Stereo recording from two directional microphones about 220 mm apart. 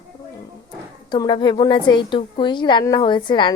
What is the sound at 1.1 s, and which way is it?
A woman's voice, 20° left (ahead or behind).